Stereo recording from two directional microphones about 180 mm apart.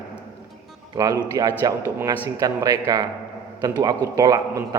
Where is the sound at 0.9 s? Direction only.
20° right (ahead or behind).